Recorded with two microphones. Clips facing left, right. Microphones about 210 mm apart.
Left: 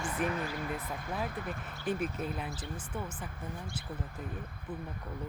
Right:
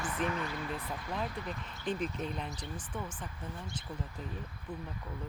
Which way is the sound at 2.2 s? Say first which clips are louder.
Left 1 dB; 5° left (ahead or behind).